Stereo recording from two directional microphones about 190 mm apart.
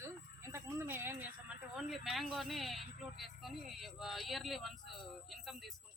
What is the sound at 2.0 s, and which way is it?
A woman's voice, centre (ahead or behind).